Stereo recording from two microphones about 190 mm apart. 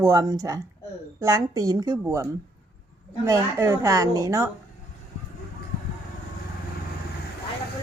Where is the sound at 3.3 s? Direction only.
15° right (ahead or behind).